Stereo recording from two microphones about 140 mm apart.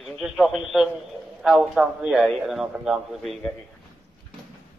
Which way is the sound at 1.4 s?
5° right (ahead or behind).